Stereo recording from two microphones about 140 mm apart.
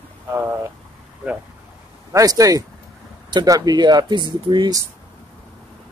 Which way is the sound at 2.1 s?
25° right (ahead or behind).